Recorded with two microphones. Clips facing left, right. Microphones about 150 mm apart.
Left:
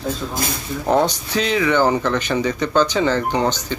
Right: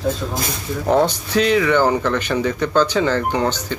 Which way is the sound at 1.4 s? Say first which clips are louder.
Right 2 dB; centre (ahead or behind).